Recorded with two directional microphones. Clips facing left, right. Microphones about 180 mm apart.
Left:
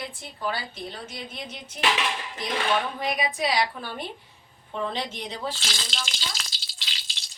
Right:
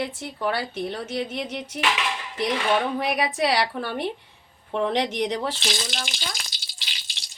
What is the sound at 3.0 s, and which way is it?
A woman's voice, 70° right (ahead or behind).